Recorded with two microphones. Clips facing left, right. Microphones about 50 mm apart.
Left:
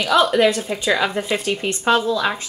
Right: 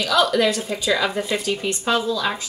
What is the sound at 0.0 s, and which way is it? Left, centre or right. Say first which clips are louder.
Speech: left 3 dB; left.